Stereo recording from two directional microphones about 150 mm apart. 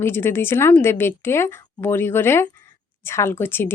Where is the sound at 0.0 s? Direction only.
15° left (ahead or behind).